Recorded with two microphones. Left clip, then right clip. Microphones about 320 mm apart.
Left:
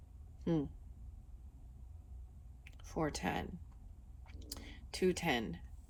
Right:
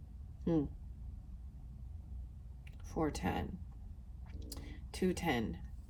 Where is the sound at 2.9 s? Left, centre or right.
Left.